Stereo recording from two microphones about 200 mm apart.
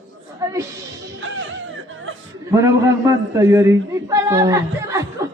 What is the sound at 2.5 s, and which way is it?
A man's voice, 15° right (ahead or behind).